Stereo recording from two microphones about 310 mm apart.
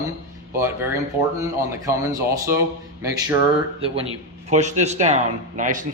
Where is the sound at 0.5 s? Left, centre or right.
Centre.